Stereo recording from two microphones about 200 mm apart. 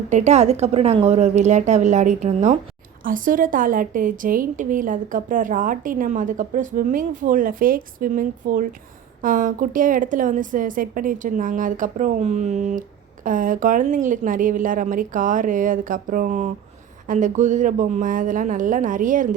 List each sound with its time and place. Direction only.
0.1 s a woman's voice: 35° right (ahead or behind)